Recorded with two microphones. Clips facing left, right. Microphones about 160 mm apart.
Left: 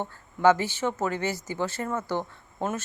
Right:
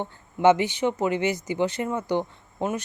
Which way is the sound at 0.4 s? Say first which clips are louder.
Right 2 dB; 20° right (ahead or behind).